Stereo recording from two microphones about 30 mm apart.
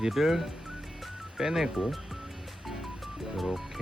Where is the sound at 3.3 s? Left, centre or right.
Centre.